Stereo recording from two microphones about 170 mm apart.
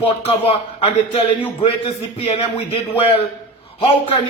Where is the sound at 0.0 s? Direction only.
35° left (ahead or behind).